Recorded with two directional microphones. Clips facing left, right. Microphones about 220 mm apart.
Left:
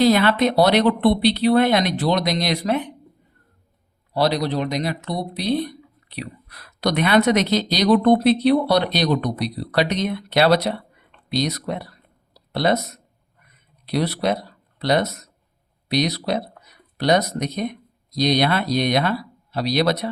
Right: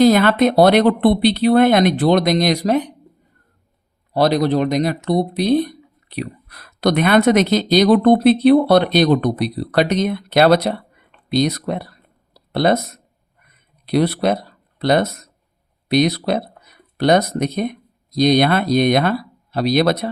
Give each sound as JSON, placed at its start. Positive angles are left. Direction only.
{"t": 0.0, "sound": "speech", "side_deg": -45}
{"t": 4.1, "sound": "speech", "side_deg": -50}
{"t": 12.3, "sound": "a sound", "side_deg": -50}
{"t": 13.8, "sound": "speech", "side_deg": -55}